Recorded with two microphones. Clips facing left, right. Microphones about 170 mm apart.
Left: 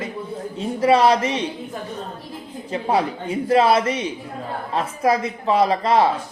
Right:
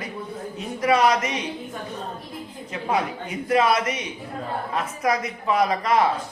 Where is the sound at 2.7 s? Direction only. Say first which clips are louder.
Left 4 dB; 30° left (ahead or behind).